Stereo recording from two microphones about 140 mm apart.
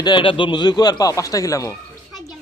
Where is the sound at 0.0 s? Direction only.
35° left (ahead or behind).